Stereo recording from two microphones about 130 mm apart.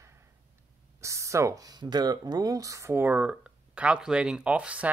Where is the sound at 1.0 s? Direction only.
25° right (ahead or behind).